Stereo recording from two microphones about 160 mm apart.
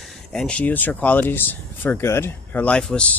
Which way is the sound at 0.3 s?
5° left (ahead or behind).